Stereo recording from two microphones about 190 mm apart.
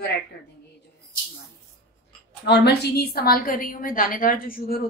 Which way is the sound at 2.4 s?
60° left (ahead or behind).